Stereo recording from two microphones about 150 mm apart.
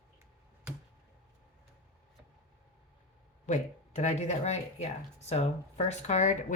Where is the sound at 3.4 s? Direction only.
50° left (ahead or behind).